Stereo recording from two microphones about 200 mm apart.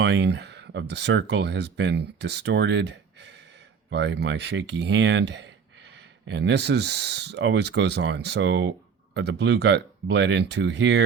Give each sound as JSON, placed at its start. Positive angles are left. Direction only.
{"t": 0.0, "sound": "speech", "side_deg": -55}